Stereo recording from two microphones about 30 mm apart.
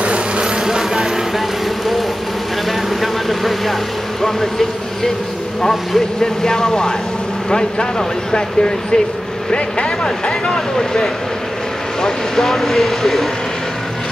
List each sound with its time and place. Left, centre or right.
0.0 s a sound: right
0.7 s vehicle: right
3.0 s vehicle: centre
4.2 s speech: centre
12.4 s speech: centre